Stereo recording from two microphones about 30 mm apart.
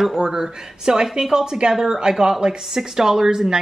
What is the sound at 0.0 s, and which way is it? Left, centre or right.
Speech, centre.